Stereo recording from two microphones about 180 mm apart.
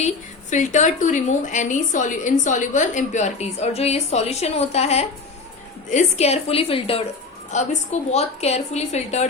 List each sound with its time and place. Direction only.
0.5 s a woman's voice: 40° left (ahead or behind)